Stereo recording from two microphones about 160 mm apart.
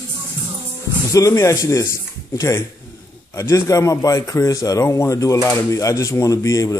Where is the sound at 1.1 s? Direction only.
20° left (ahead or behind).